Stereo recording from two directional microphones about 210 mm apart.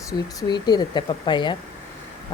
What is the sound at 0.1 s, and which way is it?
Speech, 20° left (ahead or behind).